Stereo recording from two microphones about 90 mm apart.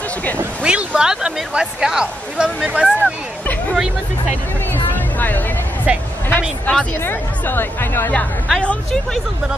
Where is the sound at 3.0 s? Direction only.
15° left (ahead or behind).